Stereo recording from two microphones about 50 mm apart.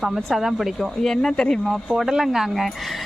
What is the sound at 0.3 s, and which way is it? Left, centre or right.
Speech, centre.